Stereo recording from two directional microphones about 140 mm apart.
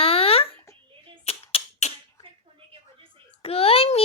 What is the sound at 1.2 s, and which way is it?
Beatboxing, 45° left (ahead or behind).